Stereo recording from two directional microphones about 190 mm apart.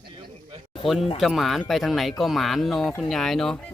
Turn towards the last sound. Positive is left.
turn(degrees=5)  # may be behind; listen again after turning